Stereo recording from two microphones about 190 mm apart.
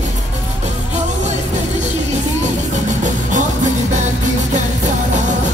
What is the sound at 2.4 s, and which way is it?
Music, 40° right (ahead or behind).